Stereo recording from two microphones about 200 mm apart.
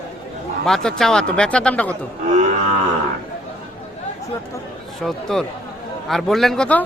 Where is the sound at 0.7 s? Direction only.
Centre (ahead or behind).